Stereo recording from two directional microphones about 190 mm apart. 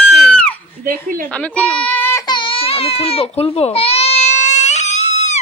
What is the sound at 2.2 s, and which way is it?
Baby cry, 25° left (ahead or behind).